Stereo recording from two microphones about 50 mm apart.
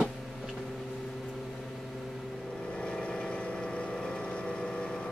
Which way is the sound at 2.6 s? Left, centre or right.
Centre.